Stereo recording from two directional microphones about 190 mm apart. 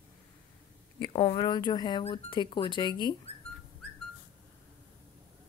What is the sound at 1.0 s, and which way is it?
Speech, 20° left (ahead or behind).